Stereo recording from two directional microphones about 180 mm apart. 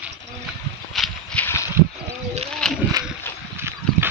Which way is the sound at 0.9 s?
10° left (ahead or behind).